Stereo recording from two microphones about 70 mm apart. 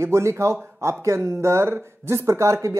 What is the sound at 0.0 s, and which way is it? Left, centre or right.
Speech, right.